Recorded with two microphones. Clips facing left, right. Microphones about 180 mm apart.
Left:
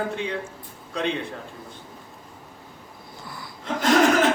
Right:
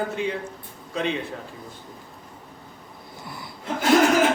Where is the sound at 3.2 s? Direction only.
20° right (ahead or behind).